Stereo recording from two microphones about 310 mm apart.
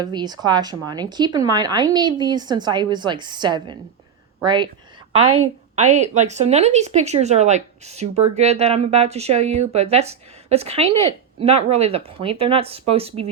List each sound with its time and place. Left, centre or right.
0.0 s speech: centre